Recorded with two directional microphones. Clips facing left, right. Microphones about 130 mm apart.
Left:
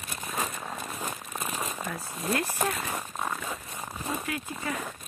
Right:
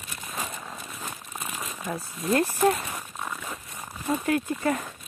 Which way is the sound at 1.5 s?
35° left (ahead or behind).